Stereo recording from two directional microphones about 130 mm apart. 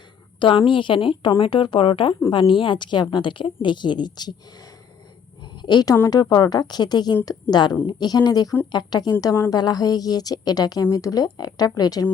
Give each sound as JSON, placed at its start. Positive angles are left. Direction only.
{"t": 0.3, "sound": "a woman's voice", "side_deg": 40}
{"t": 5.6, "sound": "a woman's voice", "side_deg": 30}